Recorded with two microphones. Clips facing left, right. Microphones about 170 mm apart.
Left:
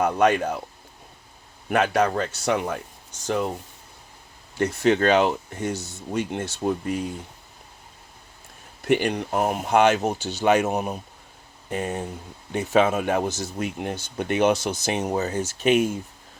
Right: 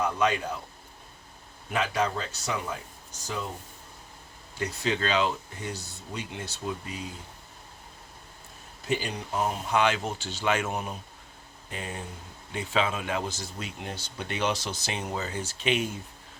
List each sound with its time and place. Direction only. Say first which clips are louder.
0.0 s speech: left 7 dB; 60° left (ahead or behind)
1.7 s speech: left 7 dB; 60° left (ahead or behind)
4.8 s speech: left 8 dB; 55° left (ahead or behind)
8.8 s speech: left 9 dB; 65° left (ahead or behind); by 15.9 s 45° left (ahead or behind)